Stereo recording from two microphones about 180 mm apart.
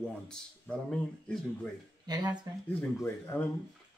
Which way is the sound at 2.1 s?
25° right (ahead or behind).